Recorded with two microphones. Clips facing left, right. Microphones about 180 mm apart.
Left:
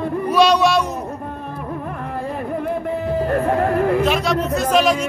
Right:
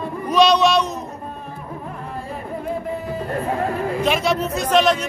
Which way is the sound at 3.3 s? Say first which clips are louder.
Left 4 dB; 60° left (ahead or behind).